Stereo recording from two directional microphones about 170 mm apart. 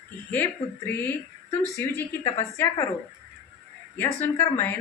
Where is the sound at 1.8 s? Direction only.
15° left (ahead or behind).